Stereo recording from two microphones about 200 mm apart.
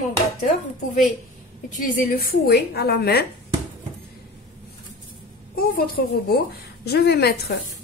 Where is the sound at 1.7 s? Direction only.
40° left (ahead or behind).